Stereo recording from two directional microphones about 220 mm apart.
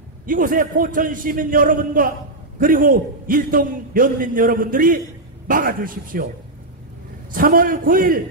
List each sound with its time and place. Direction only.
0.3 s a man's voice: 40° right (ahead or behind)
7.3 s a man's voice: 40° right (ahead or behind)